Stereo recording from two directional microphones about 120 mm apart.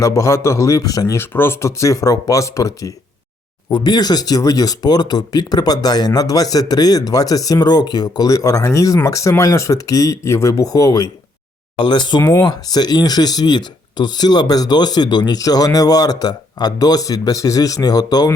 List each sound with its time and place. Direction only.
0.0 s speech: 25° left (ahead or behind)
11.8 s speech: 40° left (ahead or behind)
12.2 s speech: 25° left (ahead or behind)